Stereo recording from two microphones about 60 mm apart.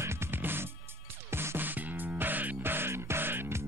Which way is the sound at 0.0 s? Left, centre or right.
Right.